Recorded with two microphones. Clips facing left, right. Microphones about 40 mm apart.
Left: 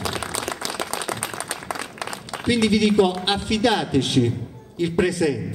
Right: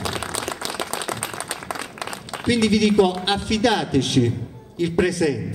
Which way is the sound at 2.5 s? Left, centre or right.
Centre.